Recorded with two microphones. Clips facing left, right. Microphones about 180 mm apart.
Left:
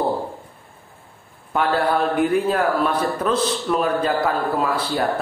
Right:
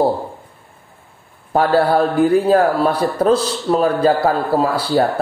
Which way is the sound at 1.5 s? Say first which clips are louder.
Right 6 dB; 35° right (ahead or behind).